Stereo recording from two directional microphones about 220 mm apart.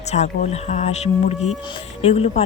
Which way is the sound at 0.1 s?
30° left (ahead or behind).